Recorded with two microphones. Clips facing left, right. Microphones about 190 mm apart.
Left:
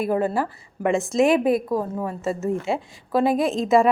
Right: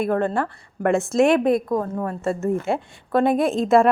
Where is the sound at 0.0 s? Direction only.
5° left (ahead or behind).